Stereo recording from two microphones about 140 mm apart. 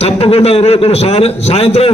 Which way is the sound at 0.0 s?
45° left (ahead or behind).